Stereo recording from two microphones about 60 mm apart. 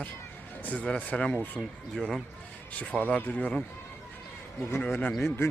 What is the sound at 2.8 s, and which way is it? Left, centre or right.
Speech, left.